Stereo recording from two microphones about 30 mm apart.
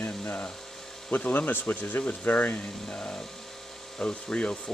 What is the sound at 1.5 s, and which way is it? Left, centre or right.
Speech, left.